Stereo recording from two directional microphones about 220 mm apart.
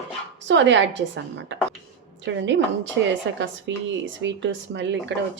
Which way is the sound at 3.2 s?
60° right (ahead or behind).